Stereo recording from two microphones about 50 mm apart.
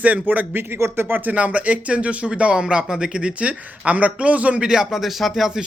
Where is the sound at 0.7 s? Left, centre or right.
Right.